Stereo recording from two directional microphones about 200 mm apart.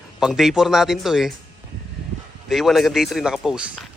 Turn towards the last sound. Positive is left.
turn(degrees=-5)  # may be behind; listen again after turning